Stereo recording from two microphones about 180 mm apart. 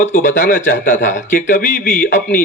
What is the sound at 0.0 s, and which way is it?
A man's voice, 45° left (ahead or behind).